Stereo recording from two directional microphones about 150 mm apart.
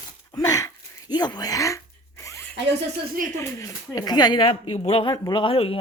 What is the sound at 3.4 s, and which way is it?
Speech, 20° left (ahead or behind).